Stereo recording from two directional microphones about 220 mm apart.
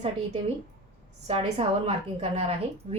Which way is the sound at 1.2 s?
30° right (ahead or behind).